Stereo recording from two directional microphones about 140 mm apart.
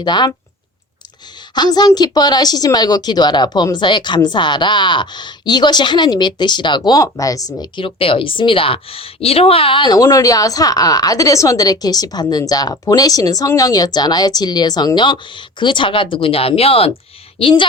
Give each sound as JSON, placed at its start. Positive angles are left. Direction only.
{"t": 0.0, "sound": "speech", "side_deg": 30}
{"t": 1.5, "sound": "a woman's voice", "side_deg": 30}
{"t": 7.8, "sound": "a woman's voice", "side_deg": 40}